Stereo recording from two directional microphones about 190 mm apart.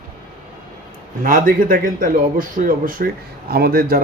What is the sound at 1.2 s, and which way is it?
Speech, 45° right (ahead or behind).